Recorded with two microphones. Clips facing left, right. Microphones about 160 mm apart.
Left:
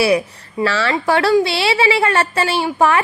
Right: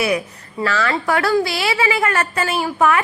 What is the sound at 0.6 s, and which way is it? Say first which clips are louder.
A woman's voice: left 2 dB; 30° left (ahead or behind).